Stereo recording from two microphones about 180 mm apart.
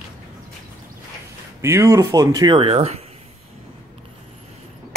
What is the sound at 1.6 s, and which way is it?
Speech, 15° right (ahead or behind).